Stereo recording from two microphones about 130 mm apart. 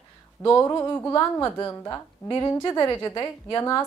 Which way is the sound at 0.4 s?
20° left (ahead or behind).